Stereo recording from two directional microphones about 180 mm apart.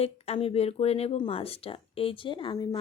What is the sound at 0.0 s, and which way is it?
Speech, 35° left (ahead or behind).